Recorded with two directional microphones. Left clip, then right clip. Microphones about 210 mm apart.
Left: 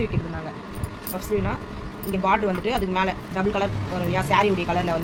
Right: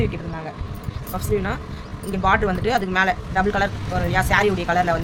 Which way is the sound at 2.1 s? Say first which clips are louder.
Right 2 dB; 25° right (ahead or behind).